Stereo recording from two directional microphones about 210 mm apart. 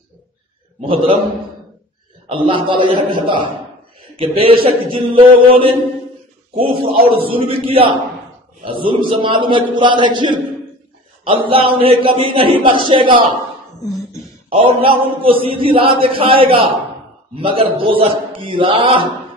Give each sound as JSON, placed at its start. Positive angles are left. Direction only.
{"t": 0.7, "sound": "a man's voice", "side_deg": -25}
{"t": 2.2, "sound": "a man's voice", "side_deg": -25}
{"t": 14.5, "sound": "a man's voice", "side_deg": -25}